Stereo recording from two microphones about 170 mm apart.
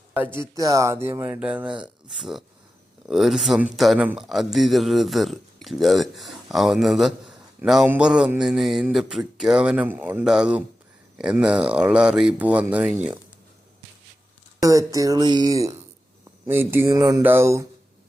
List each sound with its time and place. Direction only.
0.3 s speech: 20° right (ahead or behind)
14.6 s speech: 20° right (ahead or behind)